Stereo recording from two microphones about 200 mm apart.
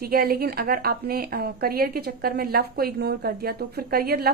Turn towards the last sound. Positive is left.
turn(degrees=-50)  # may be behind; listen again after turning